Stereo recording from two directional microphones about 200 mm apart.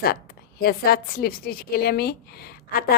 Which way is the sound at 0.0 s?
50° left (ahead or behind).